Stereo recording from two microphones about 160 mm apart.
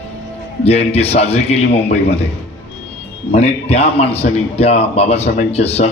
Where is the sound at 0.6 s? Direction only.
40° left (ahead or behind).